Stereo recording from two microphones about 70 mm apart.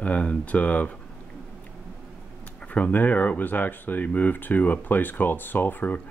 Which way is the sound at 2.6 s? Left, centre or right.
Left.